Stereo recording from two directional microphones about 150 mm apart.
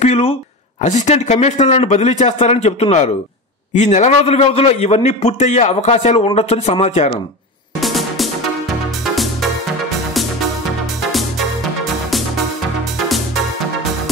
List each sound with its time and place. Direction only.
0.0 s speech: 45° left (ahead or behind)
0.7 s a man's voice: 55° left (ahead or behind)
7.8 s music: centre (ahead or behind)
11.0 s music: centre (ahead or behind)